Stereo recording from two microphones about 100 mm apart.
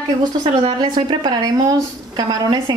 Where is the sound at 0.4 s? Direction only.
55° right (ahead or behind).